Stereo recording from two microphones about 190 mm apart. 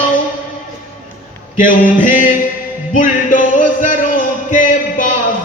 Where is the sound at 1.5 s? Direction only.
45° left (ahead or behind).